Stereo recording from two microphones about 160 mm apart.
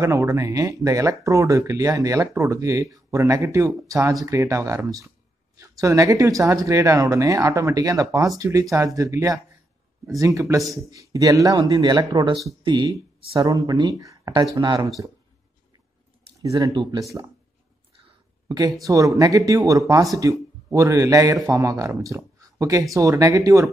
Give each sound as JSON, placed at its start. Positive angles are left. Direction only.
{"t": 0.0, "sound": "speech", "side_deg": -20}
{"t": 16.5, "sound": "speech", "side_deg": -25}
{"t": 18.5, "sound": "speech", "side_deg": -25}